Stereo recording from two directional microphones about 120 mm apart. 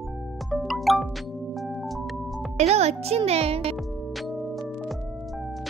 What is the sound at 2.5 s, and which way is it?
A child's voice, 65° right (ahead or behind).